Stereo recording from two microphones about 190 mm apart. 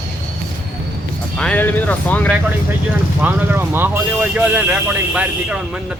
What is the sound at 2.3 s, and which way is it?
Speech, 10° right (ahead or behind).